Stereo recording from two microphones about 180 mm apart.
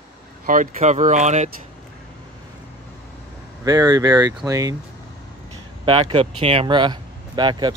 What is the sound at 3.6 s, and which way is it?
Speech, 20° right (ahead or behind).